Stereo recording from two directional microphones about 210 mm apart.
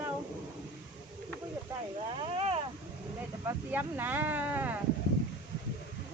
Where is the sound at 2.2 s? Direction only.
25° right (ahead or behind).